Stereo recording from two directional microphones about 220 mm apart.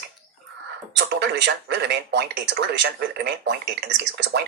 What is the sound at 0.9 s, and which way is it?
Speech, 50° right (ahead or behind).